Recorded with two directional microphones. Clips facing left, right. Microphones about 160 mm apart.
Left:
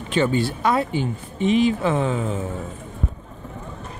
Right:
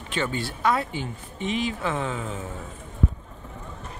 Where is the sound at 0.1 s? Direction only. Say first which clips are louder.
Left 8 dB; 20° left (ahead or behind).